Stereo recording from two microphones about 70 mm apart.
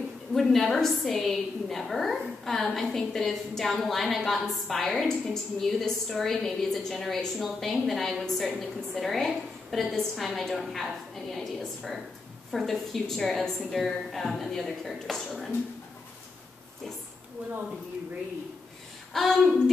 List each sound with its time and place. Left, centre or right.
0.3 s a woman's voice: centre
17.4 s speech: right
19.1 s a woman's voice: centre